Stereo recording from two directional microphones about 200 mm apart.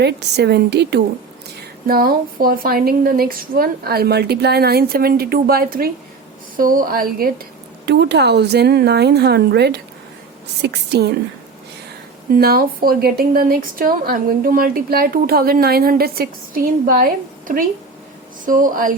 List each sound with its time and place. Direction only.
0.0 s a woman's voice: 55° right (ahead or behind)
7.9 s a woman's voice: 55° right (ahead or behind)
12.3 s a woman's voice: 50° right (ahead or behind)